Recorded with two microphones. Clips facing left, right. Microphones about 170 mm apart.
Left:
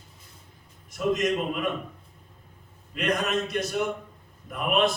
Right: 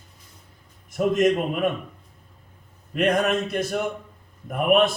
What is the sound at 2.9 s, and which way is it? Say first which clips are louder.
A man's voice: right 5 dB; 50° right (ahead or behind).